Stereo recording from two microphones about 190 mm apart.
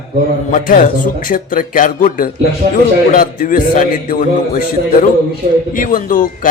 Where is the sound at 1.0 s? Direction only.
45° left (ahead or behind).